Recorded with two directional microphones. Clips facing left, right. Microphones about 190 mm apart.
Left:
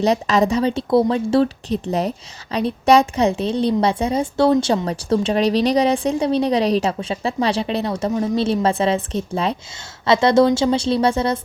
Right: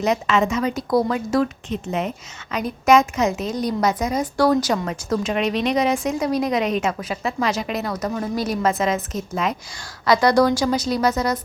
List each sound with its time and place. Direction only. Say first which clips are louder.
0.0 s a woman's voice: left 3 dB; 35° left (ahead or behind)